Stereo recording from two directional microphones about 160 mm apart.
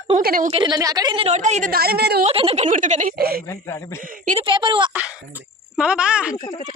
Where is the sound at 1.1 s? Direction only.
40° right (ahead or behind).